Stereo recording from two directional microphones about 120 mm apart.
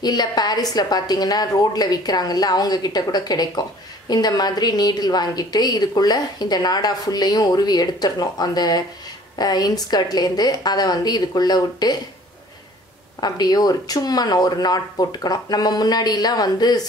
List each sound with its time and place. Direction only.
0.0 s a woman's voice: 35° left (ahead or behind)
13.2 s a woman's voice: 35° left (ahead or behind)